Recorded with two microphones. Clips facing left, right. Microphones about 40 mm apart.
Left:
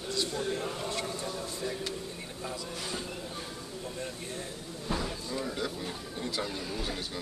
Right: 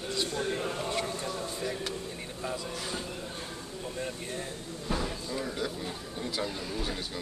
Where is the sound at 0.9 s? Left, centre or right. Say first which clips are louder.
Right 2 dB; right.